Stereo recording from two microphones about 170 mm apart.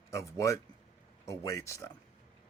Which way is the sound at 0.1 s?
15° left (ahead or behind).